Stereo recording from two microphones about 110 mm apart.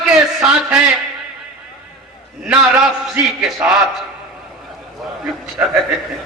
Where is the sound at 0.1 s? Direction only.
10° right (ahead or behind).